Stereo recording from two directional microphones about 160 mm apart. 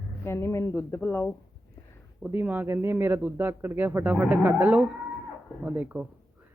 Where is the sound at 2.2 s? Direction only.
10° right (ahead or behind).